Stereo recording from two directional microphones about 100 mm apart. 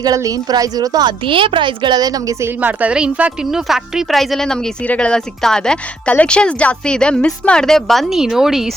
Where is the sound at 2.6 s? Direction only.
15° right (ahead or behind).